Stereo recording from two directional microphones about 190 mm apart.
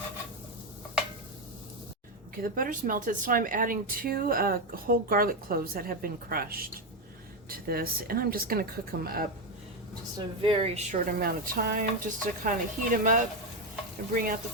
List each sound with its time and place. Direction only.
2.4 s speech: 45° right (ahead or behind)
10.2 s speech: 30° right (ahead or behind)
11.0 s speech: 50° right (ahead or behind)